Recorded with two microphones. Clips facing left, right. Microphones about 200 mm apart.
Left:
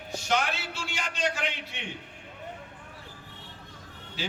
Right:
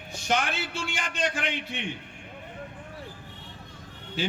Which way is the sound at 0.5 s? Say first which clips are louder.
Right 3 dB; 55° right (ahead or behind).